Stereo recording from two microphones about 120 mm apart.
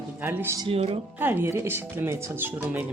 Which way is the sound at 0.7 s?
50° right (ahead or behind).